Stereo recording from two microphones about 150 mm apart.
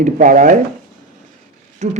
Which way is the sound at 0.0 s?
60° right (ahead or behind).